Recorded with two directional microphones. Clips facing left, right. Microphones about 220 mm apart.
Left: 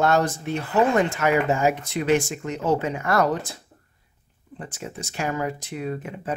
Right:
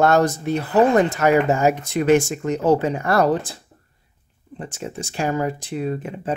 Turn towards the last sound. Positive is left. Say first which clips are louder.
# right 4 dB
turn(degrees=-30)  # may be behind; listen again after turning